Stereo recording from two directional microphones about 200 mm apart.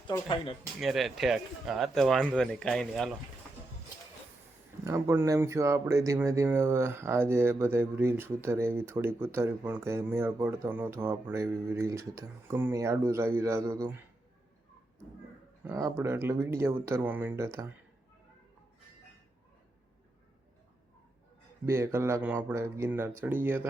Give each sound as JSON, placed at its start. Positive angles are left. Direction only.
{"t": 0.1, "sound": "speech", "side_deg": 20}
{"t": 0.8, "sound": "speech", "side_deg": 0}
{"t": 4.8, "sound": "speech", "side_deg": -15}
{"t": 15.6, "sound": "speech", "side_deg": -10}
{"t": 21.7, "sound": "speech", "side_deg": -15}